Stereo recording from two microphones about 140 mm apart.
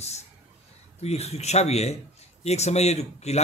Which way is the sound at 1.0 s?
50° left (ahead or behind).